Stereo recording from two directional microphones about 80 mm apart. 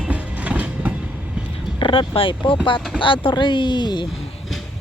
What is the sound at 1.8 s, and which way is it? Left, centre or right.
A woman's voice, left.